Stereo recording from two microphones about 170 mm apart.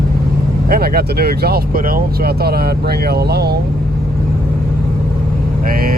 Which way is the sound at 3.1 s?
70° right (ahead or behind).